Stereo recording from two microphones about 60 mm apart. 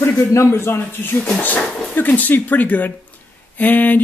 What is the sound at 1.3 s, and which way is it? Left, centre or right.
Speech, left.